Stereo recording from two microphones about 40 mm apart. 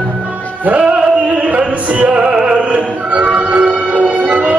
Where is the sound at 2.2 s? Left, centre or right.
Right.